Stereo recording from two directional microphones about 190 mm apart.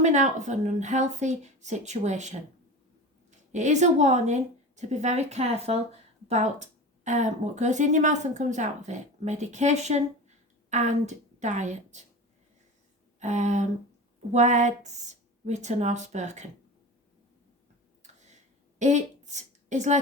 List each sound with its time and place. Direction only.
0.0 s speech: 40° right (ahead or behind)
3.5 s speech: 40° right (ahead or behind)
13.1 s a sound: 40° right (ahead or behind)
14.3 s speech: 40° right (ahead or behind)
18.0 s a sound: 40° right (ahead or behind)
18.8 s a woman's voice: 40° right (ahead or behind)